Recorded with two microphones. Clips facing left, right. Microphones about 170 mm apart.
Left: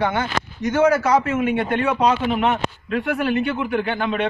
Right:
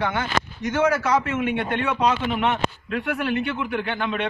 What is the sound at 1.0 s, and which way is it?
Speech, 40° left (ahead or behind).